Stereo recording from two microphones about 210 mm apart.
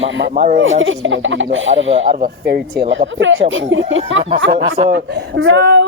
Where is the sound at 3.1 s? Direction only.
65° right (ahead or behind).